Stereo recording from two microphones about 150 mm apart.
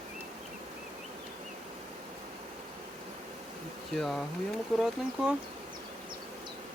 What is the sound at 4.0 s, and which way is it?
Speech, centre (ahead or behind).